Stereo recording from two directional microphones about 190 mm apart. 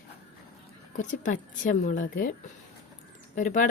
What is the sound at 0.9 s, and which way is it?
Speech, 40° left (ahead or behind).